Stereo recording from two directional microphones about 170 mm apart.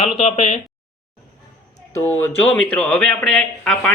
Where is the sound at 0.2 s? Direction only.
40° left (ahead or behind).